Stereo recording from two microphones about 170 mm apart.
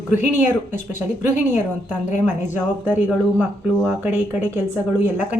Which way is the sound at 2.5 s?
10° right (ahead or behind).